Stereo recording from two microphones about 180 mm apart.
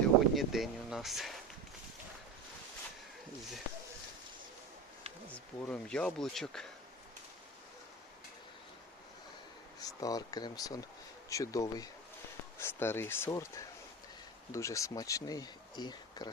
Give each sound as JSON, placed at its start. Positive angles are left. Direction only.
{"t": 0.0, "sound": "a sound", "side_deg": 0}
{"t": 5.3, "sound": "speech", "side_deg": 5}
{"t": 9.8, "sound": "speech", "side_deg": 20}
{"t": 14.5, "sound": "speech", "side_deg": 15}